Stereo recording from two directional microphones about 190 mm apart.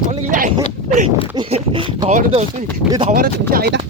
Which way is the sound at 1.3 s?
25° right (ahead or behind).